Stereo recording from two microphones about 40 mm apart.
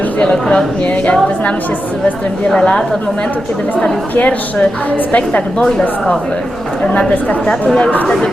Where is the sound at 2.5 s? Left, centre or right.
Left.